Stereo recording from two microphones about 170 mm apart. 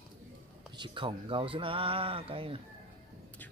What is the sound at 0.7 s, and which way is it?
Speech, 30° right (ahead or behind).